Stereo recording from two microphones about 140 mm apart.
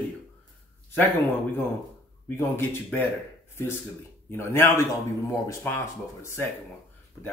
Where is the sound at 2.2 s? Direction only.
15° left (ahead or behind).